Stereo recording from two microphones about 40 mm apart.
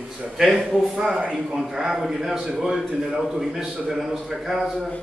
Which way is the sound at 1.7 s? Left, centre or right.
Centre.